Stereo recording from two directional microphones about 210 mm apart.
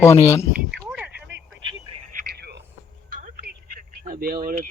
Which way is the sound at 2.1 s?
50° right (ahead or behind).